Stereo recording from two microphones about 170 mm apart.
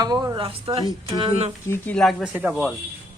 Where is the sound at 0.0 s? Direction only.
20° right (ahead or behind).